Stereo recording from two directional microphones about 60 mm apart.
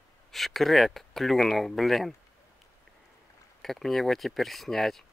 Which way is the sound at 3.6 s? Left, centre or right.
Centre.